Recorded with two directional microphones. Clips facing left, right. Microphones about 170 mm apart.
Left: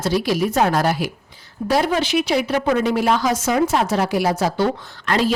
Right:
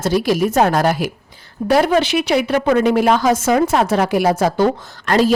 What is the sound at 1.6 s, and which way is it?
A woman's voice, 60° right (ahead or behind).